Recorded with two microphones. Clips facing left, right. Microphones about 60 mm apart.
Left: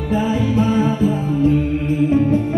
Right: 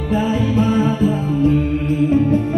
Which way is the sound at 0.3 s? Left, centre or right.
Right.